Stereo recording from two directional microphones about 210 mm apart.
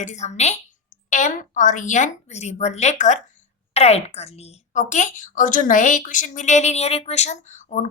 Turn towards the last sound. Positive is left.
turn(degrees=35)  # may be behind; listen again after turning